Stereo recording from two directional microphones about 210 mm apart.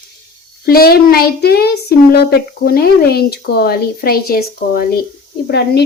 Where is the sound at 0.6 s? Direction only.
45° left (ahead or behind).